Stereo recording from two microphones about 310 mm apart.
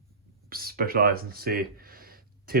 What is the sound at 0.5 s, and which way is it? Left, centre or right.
Speech, right.